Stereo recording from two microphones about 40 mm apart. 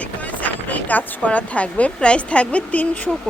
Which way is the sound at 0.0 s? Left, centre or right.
Left.